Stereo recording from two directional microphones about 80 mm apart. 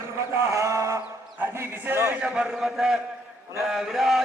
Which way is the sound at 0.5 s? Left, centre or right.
Right.